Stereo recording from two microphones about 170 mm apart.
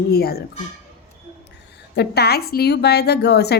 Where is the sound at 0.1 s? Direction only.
65° left (ahead or behind).